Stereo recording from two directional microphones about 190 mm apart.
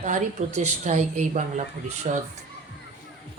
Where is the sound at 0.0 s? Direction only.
35° right (ahead or behind).